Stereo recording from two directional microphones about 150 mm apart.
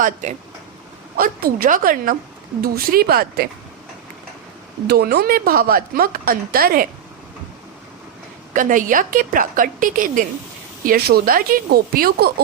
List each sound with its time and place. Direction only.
0.0 s a woman's voice: 55° right (ahead or behind)
1.1 s a woman's voice: 80° right
2.7 s speech: 90° right
4.9 s speech: 90° right
8.5 s a woman's voice: 60° right (ahead or behind)
10.8 s speech: 90° right